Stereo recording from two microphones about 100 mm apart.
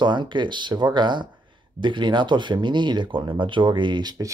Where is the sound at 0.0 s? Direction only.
50° right (ahead or behind).